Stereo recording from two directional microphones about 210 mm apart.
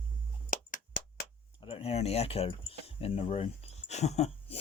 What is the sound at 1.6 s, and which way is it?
Speech, 25° left (ahead or behind).